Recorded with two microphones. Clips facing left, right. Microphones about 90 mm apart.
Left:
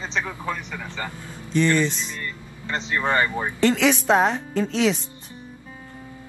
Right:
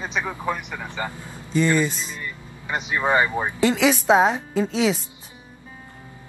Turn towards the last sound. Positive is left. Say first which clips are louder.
# even
turn(degrees=-5)  # may be behind; listen again after turning